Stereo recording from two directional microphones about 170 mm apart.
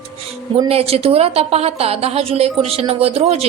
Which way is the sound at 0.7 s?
35° right (ahead or behind).